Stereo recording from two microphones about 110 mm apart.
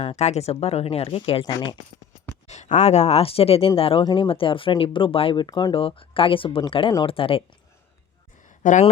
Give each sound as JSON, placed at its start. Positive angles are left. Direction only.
{"t": 0.0, "sound": "speech", "side_deg": 90}
{"t": 2.5, "sound": "speech", "side_deg": 90}
{"t": 4.0, "sound": "speech", "side_deg": 45}